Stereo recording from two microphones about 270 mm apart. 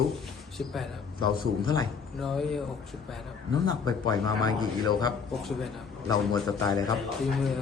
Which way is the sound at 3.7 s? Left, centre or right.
Centre.